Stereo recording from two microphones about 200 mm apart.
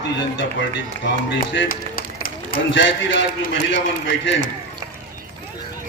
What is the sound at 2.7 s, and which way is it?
A man's voice, 65° left (ahead or behind).